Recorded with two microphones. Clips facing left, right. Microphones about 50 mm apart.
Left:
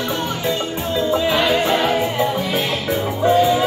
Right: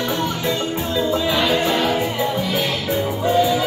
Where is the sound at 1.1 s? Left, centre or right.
Centre.